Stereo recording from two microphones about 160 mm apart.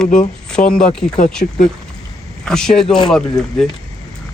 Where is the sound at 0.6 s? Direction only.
50° left (ahead or behind).